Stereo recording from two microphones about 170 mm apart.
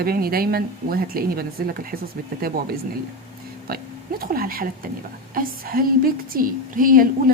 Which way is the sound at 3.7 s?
60° right (ahead or behind).